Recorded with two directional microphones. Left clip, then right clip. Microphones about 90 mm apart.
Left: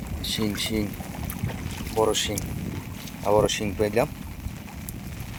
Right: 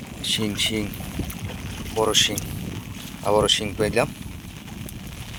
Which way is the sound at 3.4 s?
10° left (ahead or behind).